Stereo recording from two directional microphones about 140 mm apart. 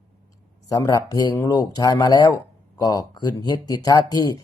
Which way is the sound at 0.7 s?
25° left (ahead or behind).